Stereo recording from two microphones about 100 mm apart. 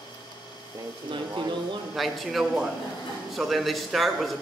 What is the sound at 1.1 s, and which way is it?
Speech, 50° right (ahead or behind).